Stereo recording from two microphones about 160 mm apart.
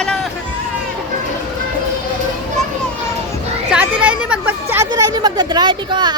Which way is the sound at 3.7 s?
10° right (ahead or behind).